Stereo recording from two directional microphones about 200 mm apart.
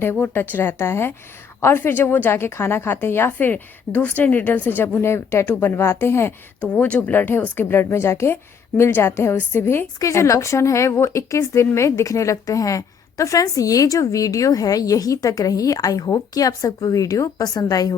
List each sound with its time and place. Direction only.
0.0 s a woman's voice: 10° left (ahead or behind)